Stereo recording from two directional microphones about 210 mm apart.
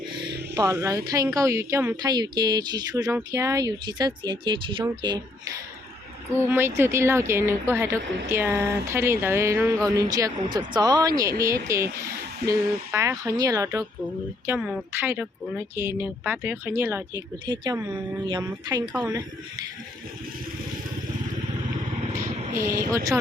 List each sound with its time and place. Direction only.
0.1 s a sound: 20° right (ahead or behind)
0.5 s speech: 15° right (ahead or behind)
6.3 s speech: 10° right (ahead or behind)
14.4 s speech: 5° right (ahead or behind)
22.4 s speech: 40° right (ahead or behind)